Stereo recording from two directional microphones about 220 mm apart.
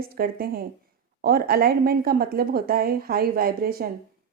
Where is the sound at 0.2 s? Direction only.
40° right (ahead or behind).